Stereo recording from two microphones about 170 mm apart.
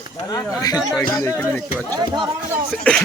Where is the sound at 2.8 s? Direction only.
5° left (ahead or behind).